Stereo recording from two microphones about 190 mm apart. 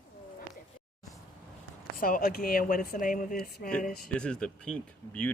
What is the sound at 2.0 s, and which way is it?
Speech, 45° left (ahead or behind).